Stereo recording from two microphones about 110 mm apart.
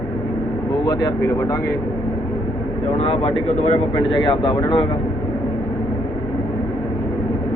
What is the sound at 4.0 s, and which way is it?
Speech, 50° left (ahead or behind).